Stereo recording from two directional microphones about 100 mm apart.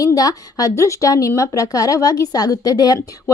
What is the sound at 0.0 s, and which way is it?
A woman's voice, 40° left (ahead or behind).